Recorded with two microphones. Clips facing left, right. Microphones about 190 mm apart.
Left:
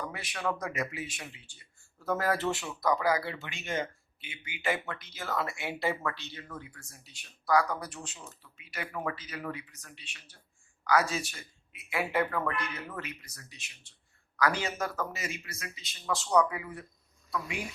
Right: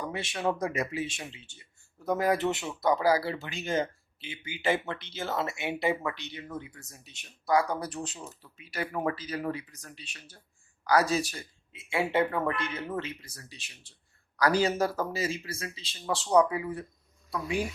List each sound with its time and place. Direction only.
0.1 s speech: 25° right (ahead or behind)